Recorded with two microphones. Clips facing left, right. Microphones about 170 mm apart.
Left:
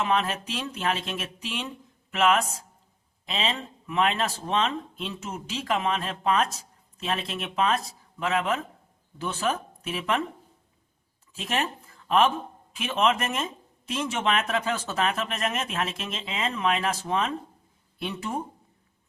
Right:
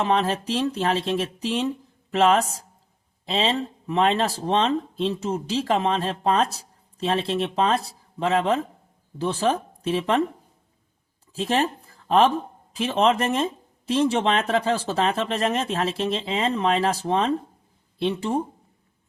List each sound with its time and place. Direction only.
0.0 s speech: 35° right (ahead or behind)
11.3 s speech: 35° right (ahead or behind)